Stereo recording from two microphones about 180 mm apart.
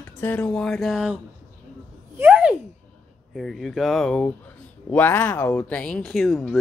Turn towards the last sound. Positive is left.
turn(degrees=0)  # may be behind; listen again after turning